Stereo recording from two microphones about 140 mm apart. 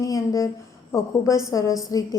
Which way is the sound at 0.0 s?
25° left (ahead or behind).